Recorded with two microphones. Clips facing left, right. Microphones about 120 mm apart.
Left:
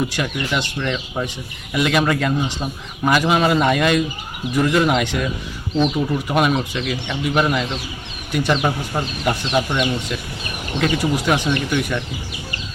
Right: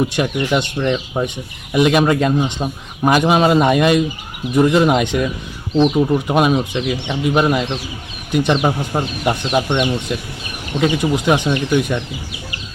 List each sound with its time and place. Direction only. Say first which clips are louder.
0.3 s speech: right 5 dB; 20° right (ahead or behind)
10.8 s speech: right 3 dB; 15° right (ahead or behind)